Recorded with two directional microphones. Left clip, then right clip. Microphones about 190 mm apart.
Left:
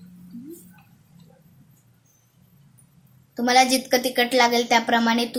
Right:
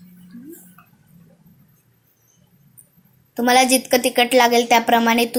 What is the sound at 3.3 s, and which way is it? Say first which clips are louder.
A woman's voice: right 3 dB; 20° right (ahead or behind).